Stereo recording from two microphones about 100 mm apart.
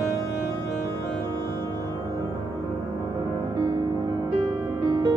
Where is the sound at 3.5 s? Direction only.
45° right (ahead or behind).